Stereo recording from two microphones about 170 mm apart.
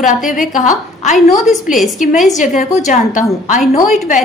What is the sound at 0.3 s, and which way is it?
Speech, 50° left (ahead or behind).